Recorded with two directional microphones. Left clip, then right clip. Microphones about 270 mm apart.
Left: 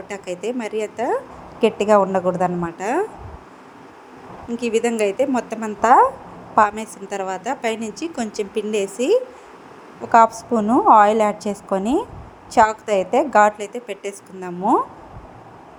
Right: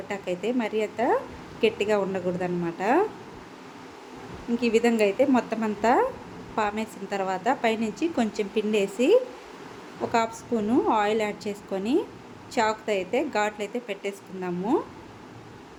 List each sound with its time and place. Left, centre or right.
0.1 s a woman's voice: centre
4.6 s a woman's voice: centre